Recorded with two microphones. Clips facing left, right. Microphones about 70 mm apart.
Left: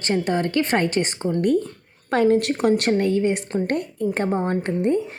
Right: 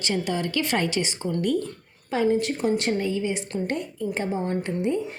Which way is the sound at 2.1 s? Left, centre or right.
Left.